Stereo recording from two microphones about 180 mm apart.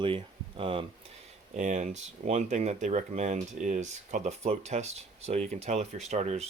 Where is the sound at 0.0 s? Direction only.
30° right (ahead or behind).